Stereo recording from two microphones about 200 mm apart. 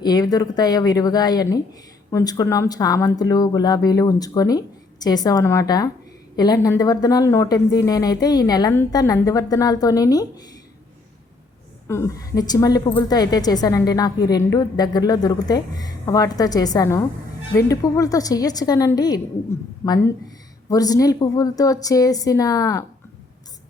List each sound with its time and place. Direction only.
0.0 s a woman's voice: 20° left (ahead or behind)
11.9 s a woman's voice: 15° left (ahead or behind)